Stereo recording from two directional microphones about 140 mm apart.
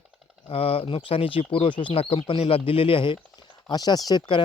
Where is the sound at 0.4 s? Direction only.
45° left (ahead or behind).